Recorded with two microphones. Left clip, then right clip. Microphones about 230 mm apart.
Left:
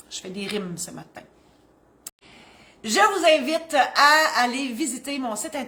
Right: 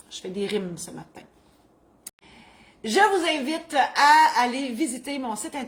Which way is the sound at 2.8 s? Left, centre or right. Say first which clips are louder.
Left 1 dB; centre.